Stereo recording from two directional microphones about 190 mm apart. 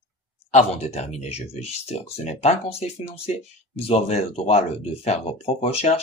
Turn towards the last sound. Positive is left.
turn(degrees=30)  # may be behind; listen again after turning